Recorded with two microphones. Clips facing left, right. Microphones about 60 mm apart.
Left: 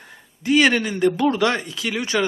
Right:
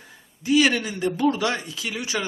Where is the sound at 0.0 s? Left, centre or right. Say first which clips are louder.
Left 4 dB; left.